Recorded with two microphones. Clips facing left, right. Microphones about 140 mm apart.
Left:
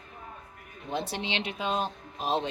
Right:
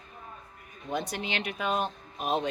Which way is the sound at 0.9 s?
30° left (ahead or behind).